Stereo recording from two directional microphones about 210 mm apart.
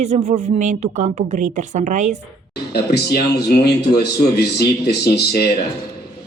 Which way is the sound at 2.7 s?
50° left (ahead or behind).